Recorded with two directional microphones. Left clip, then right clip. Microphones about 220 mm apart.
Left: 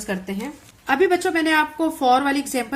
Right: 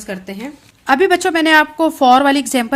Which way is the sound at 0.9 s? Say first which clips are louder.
Right 6 dB; 45° right (ahead or behind).